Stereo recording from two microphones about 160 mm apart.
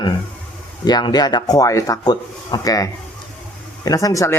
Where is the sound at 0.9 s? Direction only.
25° left (ahead or behind).